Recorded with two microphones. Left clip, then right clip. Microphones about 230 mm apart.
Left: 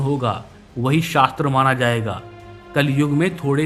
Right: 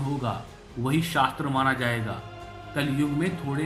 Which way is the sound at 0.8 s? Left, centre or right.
Left.